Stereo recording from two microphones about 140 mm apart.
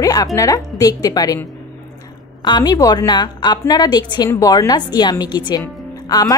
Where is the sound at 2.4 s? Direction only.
30° left (ahead or behind).